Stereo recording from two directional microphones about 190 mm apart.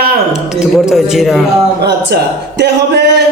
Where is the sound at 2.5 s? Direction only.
60° right (ahead or behind).